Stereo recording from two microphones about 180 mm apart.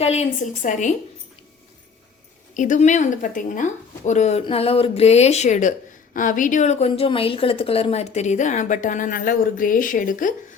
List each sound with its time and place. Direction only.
0.0 s a woman's voice: 35° left (ahead or behind)
2.6 s a woman's voice: 45° left (ahead or behind)